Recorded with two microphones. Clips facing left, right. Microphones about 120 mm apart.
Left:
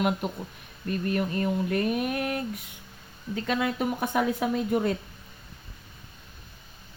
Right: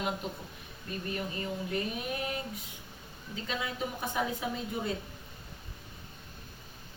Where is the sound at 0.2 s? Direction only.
65° left (ahead or behind).